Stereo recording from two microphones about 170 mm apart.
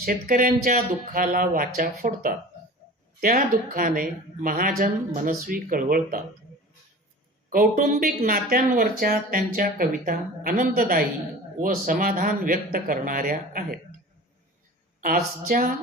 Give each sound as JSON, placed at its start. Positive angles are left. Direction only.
{"t": 0.0, "sound": "speech", "side_deg": -55}
{"t": 7.5, "sound": "speech", "side_deg": -55}
{"t": 15.0, "sound": "speech", "side_deg": -55}